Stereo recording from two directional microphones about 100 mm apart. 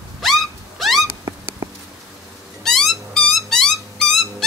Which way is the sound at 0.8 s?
Centre (ahead or behind).